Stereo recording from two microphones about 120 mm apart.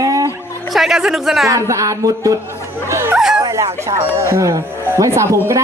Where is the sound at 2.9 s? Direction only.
25° right (ahead or behind).